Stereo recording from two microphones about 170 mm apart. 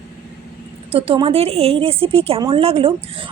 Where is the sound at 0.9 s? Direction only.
35° right (ahead or behind).